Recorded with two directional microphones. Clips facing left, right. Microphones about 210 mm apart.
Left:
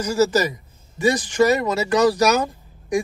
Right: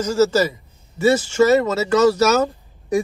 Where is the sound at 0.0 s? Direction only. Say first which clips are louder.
Right 2 dB; 10° left (ahead or behind).